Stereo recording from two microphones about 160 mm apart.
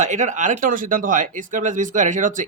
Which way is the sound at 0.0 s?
50° right (ahead or behind).